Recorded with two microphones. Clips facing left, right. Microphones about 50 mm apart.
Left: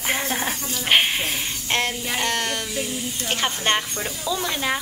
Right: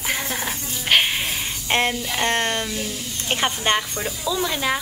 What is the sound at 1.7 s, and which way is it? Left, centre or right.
Speech, right.